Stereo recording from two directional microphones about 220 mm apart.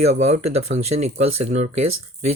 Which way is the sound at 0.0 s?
30° right (ahead or behind).